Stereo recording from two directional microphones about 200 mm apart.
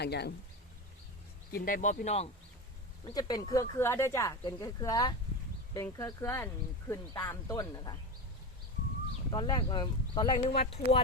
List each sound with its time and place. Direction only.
0.0 s speech: 55° left (ahead or behind)
1.5 s speech: 45° left (ahead or behind)
3.0 s speech: 20° left (ahead or behind)
9.3 s speech: 20° left (ahead or behind)